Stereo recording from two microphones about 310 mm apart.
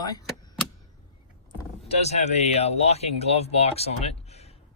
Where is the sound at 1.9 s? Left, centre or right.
Left.